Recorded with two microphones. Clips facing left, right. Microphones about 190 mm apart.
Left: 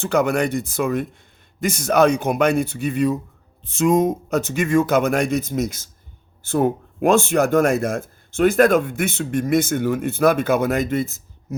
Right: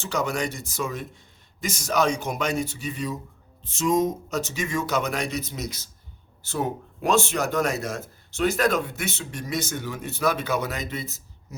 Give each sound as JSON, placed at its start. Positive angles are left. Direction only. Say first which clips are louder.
{"t": 0.0, "sound": "speech", "louder": "left 8 dB", "side_deg": 55}